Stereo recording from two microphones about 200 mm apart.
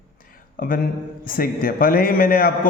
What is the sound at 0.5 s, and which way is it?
A man's voice, 45° left (ahead or behind).